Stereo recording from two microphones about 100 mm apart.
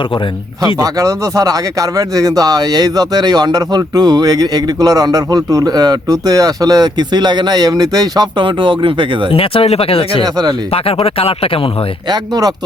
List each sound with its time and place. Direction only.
0.8 s speech: 35° right (ahead or behind)
8.4 s speech: 55° right (ahead or behind)
9.3 s speech: 70° left (ahead or behind)
10.2 s speech: 40° right (ahead or behind)
10.7 s speech: 70° left (ahead or behind)
12.0 s speech: 45° right (ahead or behind)